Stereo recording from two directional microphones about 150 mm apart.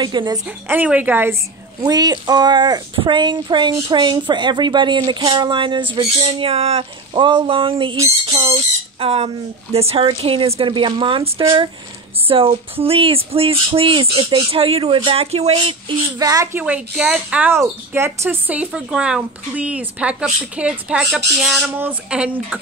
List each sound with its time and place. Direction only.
0.0 s speech: 30° right (ahead or behind)
0.7 s speech: 10° right (ahead or behind)
1.8 s speech: 25° right (ahead or behind)
9.0 s speech: 40° right (ahead or behind)
16.5 s speech: 10° right (ahead or behind)